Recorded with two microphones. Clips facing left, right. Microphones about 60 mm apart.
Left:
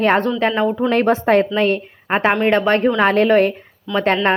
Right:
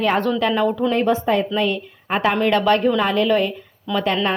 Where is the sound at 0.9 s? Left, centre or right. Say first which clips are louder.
Left 4 dB; left.